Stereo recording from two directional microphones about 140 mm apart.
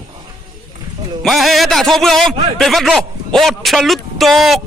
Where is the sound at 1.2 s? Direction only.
Centre (ahead or behind).